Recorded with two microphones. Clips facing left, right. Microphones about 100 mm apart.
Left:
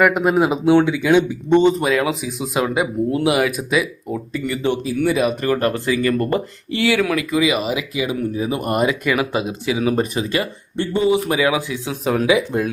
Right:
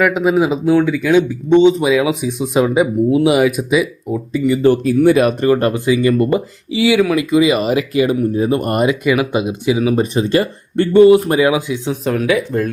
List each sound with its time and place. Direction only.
0.0 s speech: centre (ahead or behind)
5.4 s speech: 35° right (ahead or behind)
5.7 s speech: 10° right (ahead or behind)
11.4 s speech: 10° right (ahead or behind)
11.9 s speech: centre (ahead or behind)
12.5 s speech: 10° left (ahead or behind)